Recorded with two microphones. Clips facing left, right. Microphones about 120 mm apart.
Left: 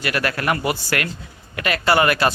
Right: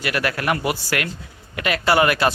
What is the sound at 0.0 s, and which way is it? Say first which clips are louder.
Speech: even; 15° right (ahead or behind).